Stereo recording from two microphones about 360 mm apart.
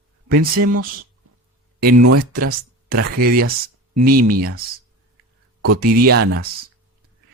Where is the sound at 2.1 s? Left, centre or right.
Right.